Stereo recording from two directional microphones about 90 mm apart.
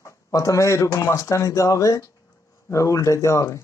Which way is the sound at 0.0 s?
35° left (ahead or behind).